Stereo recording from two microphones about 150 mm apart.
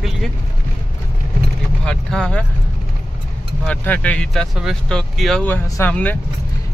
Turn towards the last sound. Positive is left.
turn(degrees=10)  # may be behind; listen again after turning